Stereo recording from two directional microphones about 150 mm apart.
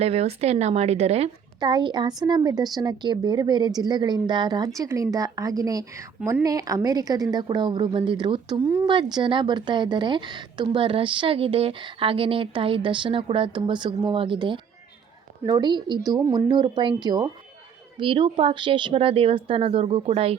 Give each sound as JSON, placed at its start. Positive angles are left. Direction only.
{"t": 0.0, "sound": "speech", "side_deg": -45}
{"t": 1.5, "sound": "a woman's voice", "side_deg": -30}